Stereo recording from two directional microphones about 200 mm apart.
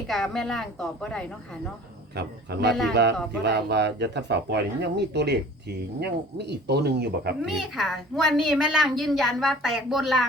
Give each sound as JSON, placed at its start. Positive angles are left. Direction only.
{"t": 0.1, "sound": "a woman's voice", "side_deg": 0}
{"t": 2.1, "sound": "speech", "side_deg": -55}
{"t": 7.4, "sound": "a woman's voice", "side_deg": 0}